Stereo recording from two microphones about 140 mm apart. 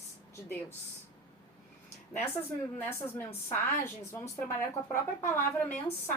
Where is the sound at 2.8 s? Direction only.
15° left (ahead or behind).